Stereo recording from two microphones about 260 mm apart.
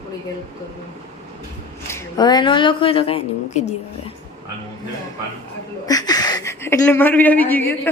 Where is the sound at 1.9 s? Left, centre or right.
Centre.